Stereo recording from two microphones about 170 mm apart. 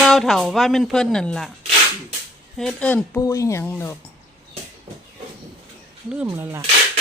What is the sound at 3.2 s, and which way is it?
Speech, 20° left (ahead or behind).